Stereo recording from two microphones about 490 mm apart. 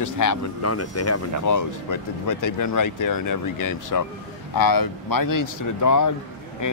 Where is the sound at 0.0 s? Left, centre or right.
Left.